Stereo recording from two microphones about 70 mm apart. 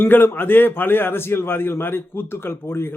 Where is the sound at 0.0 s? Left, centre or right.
Left.